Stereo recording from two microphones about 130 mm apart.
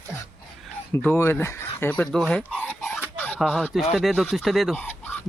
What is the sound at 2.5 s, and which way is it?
Chicken, 10° left (ahead or behind).